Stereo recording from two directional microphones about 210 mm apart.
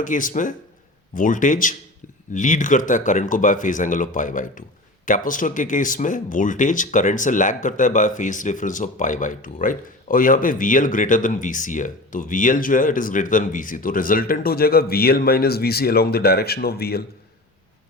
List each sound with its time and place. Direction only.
0.0 s speech: 40° left (ahead or behind)